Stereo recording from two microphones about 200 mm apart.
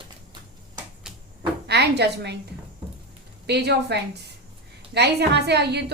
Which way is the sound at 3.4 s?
55° right (ahead or behind).